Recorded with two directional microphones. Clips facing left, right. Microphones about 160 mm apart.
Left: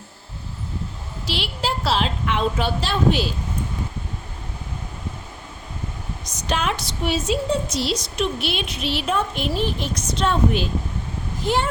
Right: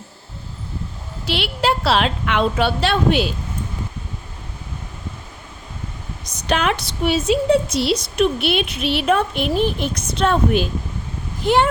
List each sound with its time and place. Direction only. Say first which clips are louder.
1.3 s a woman's voice: right 6 dB; 65° right (ahead or behind)
6.5 s a woman's voice: right 4 dB; 70° right (ahead or behind)
11.4 s a woman's voice: right 6 dB; 70° right (ahead or behind)